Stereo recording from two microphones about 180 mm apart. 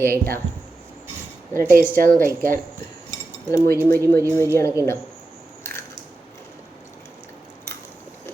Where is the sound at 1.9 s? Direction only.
50° right (ahead or behind).